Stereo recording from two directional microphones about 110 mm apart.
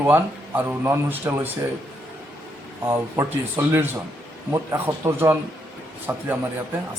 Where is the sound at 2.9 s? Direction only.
20° right (ahead or behind).